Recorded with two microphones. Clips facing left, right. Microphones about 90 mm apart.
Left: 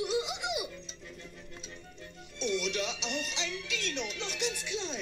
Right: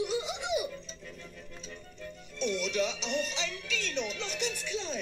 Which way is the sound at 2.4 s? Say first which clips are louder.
Right 2 dB; 40° right (ahead or behind).